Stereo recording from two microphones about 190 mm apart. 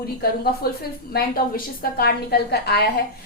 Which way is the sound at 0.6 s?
55° left (ahead or behind).